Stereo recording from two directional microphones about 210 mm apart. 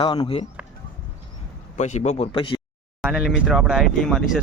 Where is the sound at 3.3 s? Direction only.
5° right (ahead or behind).